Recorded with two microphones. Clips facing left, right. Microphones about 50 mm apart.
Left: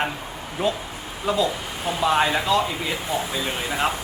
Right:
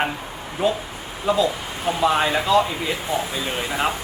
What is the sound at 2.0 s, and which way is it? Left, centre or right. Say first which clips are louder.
Speech: even; centre.